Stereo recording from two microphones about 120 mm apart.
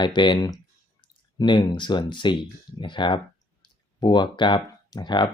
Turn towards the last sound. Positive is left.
turn(degrees=40)  # may be behind; listen again after turning